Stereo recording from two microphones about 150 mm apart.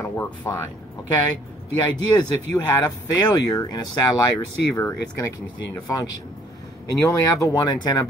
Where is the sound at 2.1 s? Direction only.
20° left (ahead or behind).